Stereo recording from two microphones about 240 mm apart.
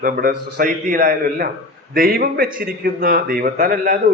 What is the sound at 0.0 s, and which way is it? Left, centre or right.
A man's voice, right.